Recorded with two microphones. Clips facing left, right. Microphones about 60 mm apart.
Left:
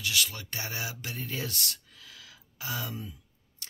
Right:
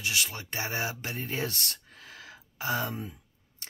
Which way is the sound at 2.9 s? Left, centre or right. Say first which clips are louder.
Right 3 dB; right.